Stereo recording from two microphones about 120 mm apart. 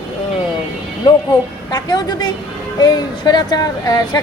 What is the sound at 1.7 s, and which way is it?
A woman's voice, 35° left (ahead or behind).